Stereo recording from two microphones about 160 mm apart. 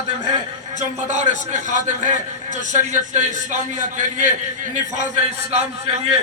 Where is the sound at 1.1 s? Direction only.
50° right (ahead or behind).